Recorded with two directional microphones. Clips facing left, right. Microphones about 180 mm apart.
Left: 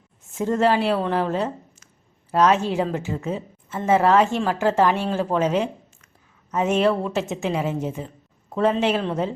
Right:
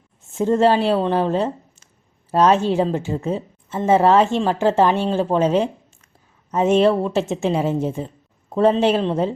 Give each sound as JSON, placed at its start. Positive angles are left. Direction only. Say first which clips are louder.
{"t": 0.3, "sound": "a woman's voice", "louder": "right 4 dB", "side_deg": -30}